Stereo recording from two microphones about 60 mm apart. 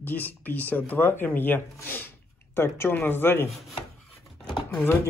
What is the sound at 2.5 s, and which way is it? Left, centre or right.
Speech, left.